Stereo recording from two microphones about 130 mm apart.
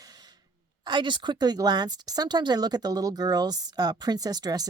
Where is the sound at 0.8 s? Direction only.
35° right (ahead or behind).